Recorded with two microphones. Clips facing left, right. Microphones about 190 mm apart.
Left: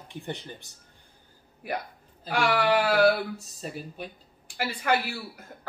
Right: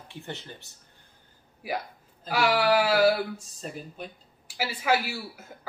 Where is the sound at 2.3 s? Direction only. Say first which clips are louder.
Right 1 dB; 5° right (ahead or behind).